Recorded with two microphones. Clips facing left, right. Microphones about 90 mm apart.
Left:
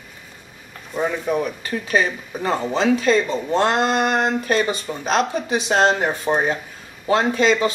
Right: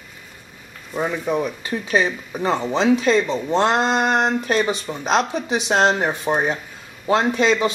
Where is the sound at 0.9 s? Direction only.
Centre (ahead or behind).